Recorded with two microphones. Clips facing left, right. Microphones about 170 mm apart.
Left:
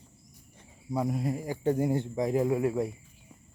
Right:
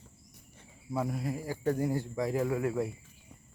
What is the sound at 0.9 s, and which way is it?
Speech, 20° left (ahead or behind).